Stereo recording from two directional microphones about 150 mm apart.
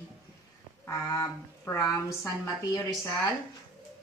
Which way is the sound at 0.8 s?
25° left (ahead or behind).